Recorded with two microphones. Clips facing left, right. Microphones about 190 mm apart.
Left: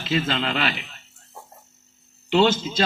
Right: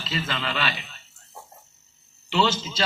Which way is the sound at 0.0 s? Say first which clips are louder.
Left 6 dB; 55° left (ahead or behind).